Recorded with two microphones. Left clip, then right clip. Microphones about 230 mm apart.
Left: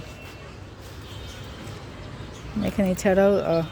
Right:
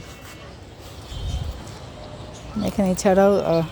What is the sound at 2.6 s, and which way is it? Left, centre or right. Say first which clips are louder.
Speech: right 3 dB; centre.